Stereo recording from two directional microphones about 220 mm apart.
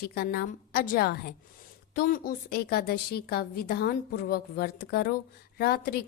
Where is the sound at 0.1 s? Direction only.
45° left (ahead or behind).